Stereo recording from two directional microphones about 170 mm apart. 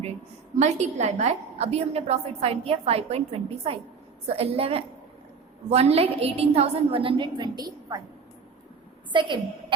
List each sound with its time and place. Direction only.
0.5 s a woman's voice: 40° right (ahead or behind); by 8.0 s 20° right (ahead or behind)
9.1 s a woman's voice: 30° right (ahead or behind)